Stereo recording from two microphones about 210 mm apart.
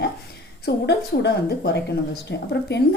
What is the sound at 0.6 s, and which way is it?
A woman's voice, 50° left (ahead or behind).